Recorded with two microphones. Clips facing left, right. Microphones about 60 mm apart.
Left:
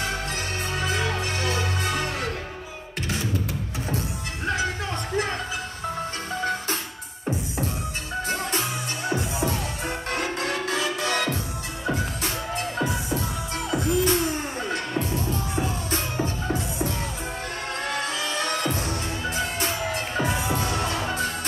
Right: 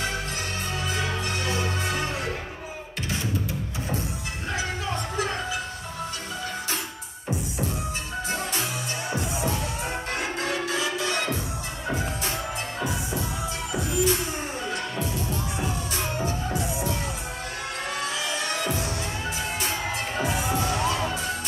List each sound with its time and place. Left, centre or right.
13.7 s music: left
17.9 s music: left
20.2 s crowd: centre